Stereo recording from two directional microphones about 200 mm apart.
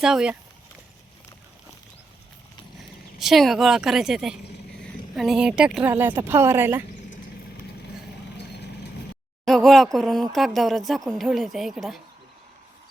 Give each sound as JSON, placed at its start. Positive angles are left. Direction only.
{"t": 0.0, "sound": "speech", "side_deg": -5}
{"t": 3.2, "sound": "speech", "side_deg": 0}
{"t": 8.4, "sound": "vehicle", "side_deg": 55}
{"t": 9.5, "sound": "speech", "side_deg": 0}